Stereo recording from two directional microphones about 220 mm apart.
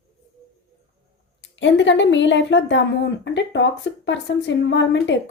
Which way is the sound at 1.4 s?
55° left (ahead or behind).